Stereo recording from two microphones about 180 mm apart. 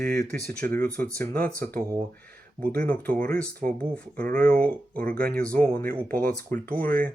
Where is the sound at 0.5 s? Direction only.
5° left (ahead or behind).